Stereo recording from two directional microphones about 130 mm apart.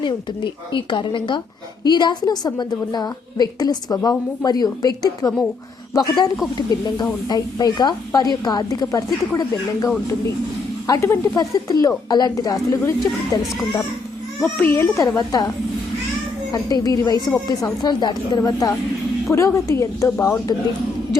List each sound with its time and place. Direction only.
0.0 s a woman's voice: 40° left (ahead or behind)
14.4 s a woman's voice: 15° left (ahead or behind)